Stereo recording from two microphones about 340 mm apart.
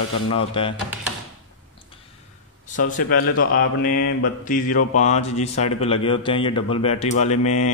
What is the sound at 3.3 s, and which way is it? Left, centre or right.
Mantra, left.